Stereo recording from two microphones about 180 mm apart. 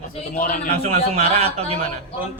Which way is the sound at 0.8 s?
35° right (ahead or behind).